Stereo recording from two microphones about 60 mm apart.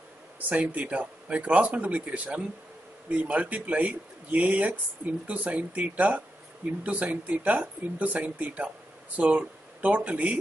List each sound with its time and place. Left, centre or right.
0.4 s speech: right